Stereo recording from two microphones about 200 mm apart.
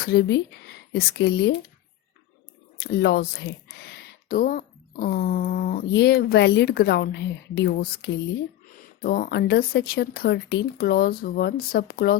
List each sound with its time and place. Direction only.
0.0 s speech: 55° left (ahead or behind)
2.8 s speech: 55° left (ahead or behind)